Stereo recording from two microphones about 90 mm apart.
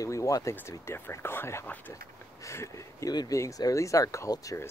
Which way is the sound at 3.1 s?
50° left (ahead or behind).